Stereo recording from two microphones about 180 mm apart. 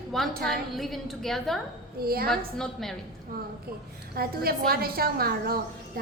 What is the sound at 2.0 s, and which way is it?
Speech, 60° right (ahead or behind).